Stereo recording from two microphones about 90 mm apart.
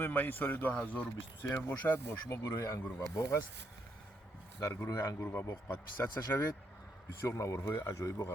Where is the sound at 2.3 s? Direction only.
35° left (ahead or behind).